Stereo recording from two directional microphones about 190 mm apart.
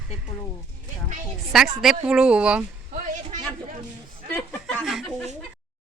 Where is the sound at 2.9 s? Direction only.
40° right (ahead or behind).